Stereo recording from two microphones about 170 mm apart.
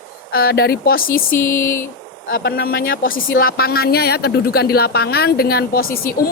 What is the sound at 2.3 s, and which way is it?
Speech, 65° left (ahead or behind).